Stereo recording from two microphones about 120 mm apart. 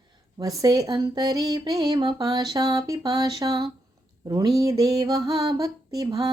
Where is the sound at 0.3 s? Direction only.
30° right (ahead or behind).